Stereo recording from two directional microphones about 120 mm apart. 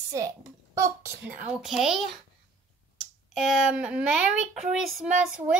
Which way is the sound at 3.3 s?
5° right (ahead or behind).